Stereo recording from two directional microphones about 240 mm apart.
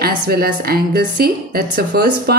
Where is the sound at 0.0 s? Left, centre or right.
Right.